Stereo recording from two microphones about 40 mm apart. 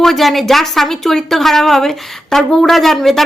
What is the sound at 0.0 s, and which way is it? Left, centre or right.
Speech, centre.